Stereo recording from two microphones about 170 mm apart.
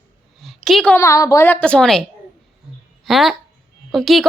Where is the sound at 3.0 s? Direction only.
Centre (ahead or behind).